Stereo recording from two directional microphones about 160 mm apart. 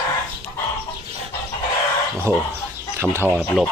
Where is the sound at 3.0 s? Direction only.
15° right (ahead or behind).